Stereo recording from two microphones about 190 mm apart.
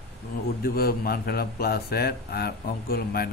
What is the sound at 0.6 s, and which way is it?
Speech, 50° left (ahead or behind).